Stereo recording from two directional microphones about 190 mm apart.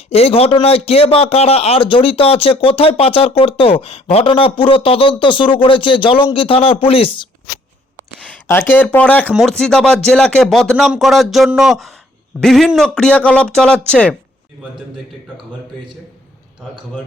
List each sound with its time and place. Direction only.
0.1 s a man's voice: 30° left (ahead or behind)
8.2 s speech: 10° left (ahead or behind)